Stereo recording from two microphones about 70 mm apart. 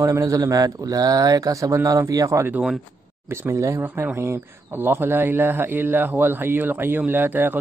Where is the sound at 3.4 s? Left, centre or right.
Right.